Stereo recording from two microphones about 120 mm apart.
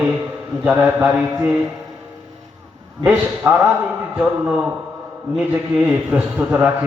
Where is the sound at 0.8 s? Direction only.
15° right (ahead or behind).